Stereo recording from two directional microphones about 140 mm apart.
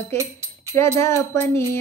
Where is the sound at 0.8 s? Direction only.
20° left (ahead or behind).